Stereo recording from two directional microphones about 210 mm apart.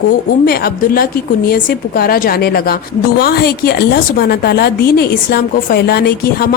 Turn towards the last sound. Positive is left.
turn(degrees=50)  # may be behind; listen again after turning